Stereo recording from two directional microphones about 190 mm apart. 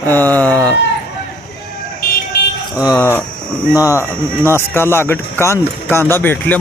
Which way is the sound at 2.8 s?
10° left (ahead or behind).